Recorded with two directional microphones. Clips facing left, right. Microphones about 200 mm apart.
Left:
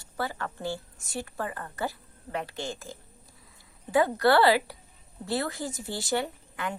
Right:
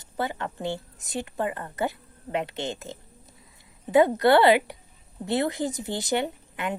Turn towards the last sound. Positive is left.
turn(degrees=-20)  # may be behind; listen again after turning